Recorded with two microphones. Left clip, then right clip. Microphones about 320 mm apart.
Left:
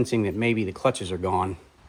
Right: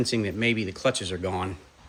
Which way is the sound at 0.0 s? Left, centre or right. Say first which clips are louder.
Left 1 dB; centre.